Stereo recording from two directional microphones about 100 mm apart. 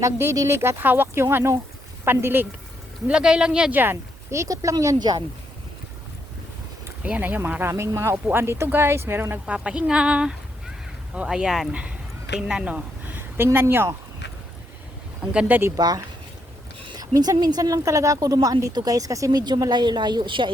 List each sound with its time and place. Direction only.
0.0 s speech: 30° right (ahead or behind)
3.1 s a woman's voice: 10° right (ahead or behind)
3.8 s a woman's voice: 25° right (ahead or behind); by 5.2 s 40° right (ahead or behind)
7.0 s speech: 15° right (ahead or behind)
9.5 s a woman's voice: 10° right (ahead or behind)
15.3 s a woman's voice: 15° right (ahead or behind)
15.7 s a woman's voice: 40° right (ahead or behind)
16.8 s a woman's voice: 50° right (ahead or behind)